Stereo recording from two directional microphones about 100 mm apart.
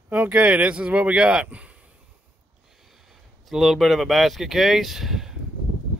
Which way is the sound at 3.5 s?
Centre (ahead or behind).